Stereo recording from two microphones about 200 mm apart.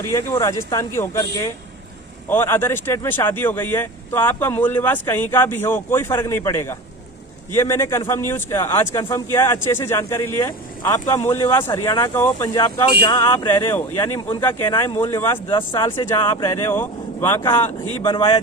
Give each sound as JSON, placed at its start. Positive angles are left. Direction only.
{"t": 0.1, "sound": "speech", "side_deg": 15}
{"t": 15.4, "sound": "speech", "side_deg": 20}